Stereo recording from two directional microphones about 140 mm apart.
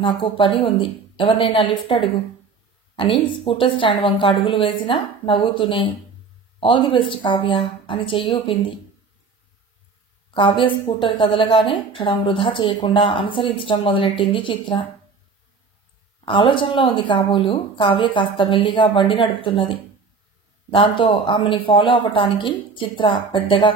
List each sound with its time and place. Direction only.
0.0 s a woman's voice: 35° left (ahead or behind)
10.3 s a woman's voice: 35° left (ahead or behind)
16.3 s a woman's voice: 35° left (ahead or behind)